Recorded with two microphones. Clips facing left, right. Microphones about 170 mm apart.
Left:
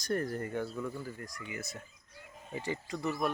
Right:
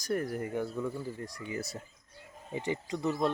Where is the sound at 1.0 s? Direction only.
30° right (ahead or behind).